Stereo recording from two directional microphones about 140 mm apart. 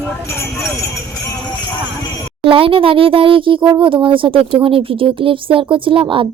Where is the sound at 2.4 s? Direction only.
40° right (ahead or behind).